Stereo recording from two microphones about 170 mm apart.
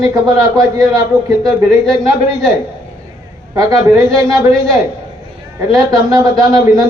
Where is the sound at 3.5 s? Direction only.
20° right (ahead or behind).